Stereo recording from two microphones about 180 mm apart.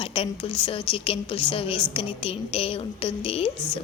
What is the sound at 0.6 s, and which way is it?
A woman's voice, 30° left (ahead or behind).